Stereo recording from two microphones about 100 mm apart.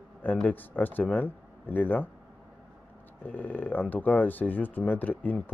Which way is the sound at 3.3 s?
20° left (ahead or behind).